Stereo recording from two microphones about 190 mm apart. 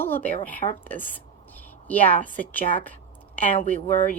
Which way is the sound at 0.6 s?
25° left (ahead or behind).